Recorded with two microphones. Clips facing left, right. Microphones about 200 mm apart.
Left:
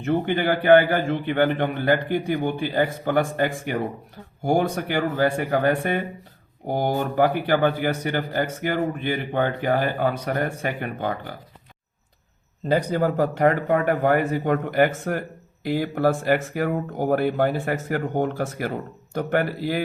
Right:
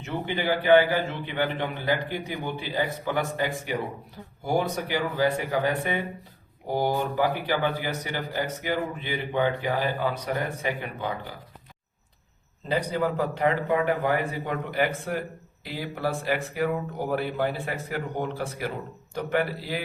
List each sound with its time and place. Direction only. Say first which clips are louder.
0.0 s a man's voice: left 7 dB; 55° left (ahead or behind)
12.6 s a man's voice: left 5 dB; 45° left (ahead or behind)